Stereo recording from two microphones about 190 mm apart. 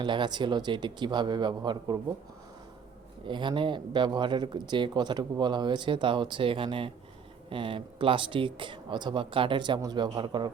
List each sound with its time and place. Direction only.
0.0 s speech: 25° right (ahead or behind)
3.2 s speech: 25° right (ahead or behind)